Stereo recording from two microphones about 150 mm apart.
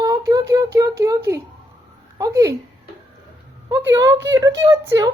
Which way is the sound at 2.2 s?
20° right (ahead or behind).